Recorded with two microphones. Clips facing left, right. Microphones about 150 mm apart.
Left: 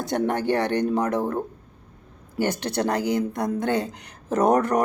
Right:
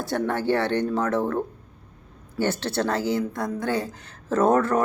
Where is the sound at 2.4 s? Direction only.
15° left (ahead or behind).